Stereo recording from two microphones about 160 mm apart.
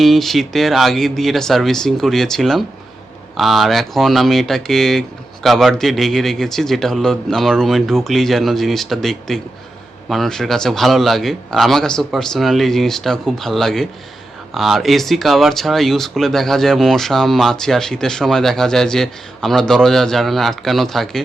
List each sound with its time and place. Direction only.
0.0 s speech: centre (ahead or behind)